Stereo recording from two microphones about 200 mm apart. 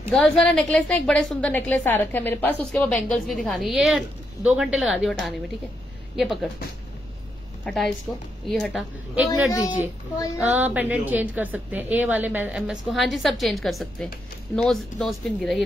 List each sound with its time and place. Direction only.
0.1 s a woman's voice: 5° left (ahead or behind)
7.6 s a woman's voice: centre (ahead or behind)
9.5 s a woman's voice: 15° left (ahead or behind)
10.5 s a woman's voice: 10° right (ahead or behind)